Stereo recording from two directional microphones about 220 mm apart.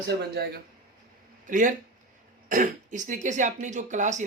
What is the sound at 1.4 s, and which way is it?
Speech, 35° right (ahead or behind).